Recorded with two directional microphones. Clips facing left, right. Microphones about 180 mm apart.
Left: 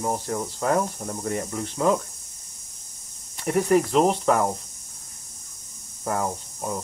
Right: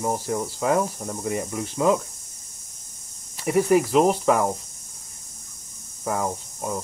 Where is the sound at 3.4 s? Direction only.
5° right (ahead or behind).